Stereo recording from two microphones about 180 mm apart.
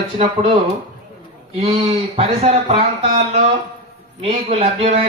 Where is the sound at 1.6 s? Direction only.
35° right (ahead or behind).